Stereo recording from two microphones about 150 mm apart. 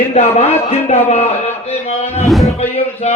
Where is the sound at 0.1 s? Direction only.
45° left (ahead or behind).